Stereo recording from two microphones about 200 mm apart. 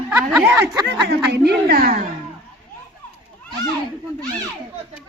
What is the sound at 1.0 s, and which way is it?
A woman's voice, 55° right (ahead or behind).